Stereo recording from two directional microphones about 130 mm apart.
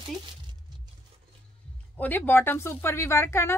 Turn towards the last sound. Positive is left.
turn(degrees=20)  # may be behind; listen again after turning